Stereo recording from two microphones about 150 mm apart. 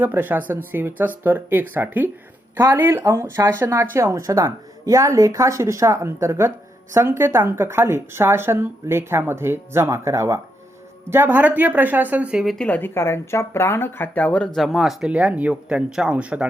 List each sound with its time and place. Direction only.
0.0 s speech: 10° right (ahead or behind)